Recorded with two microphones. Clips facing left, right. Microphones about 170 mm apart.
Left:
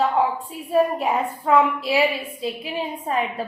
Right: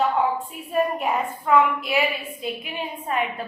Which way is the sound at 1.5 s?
35° left (ahead or behind).